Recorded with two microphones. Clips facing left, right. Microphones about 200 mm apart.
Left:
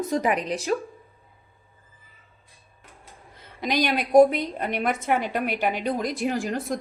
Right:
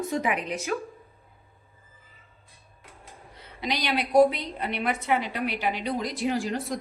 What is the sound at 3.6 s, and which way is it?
A woman's voice, 50° left (ahead or behind).